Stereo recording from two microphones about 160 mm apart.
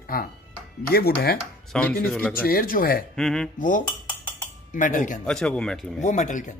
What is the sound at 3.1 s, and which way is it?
Speech, 5° left (ahead or behind).